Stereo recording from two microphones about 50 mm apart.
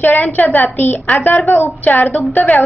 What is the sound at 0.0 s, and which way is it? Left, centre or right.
Speech, left.